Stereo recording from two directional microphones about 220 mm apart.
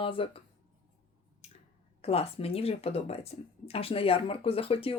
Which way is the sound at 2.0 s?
25° left (ahead or behind).